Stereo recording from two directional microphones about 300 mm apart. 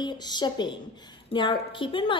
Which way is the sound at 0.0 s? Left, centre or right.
Centre.